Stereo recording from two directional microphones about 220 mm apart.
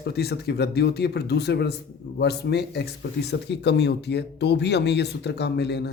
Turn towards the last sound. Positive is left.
turn(degrees=50)  # may be behind; listen again after turning